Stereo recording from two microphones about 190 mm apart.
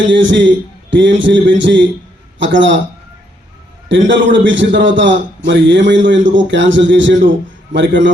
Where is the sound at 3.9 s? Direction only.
75° right (ahead or behind).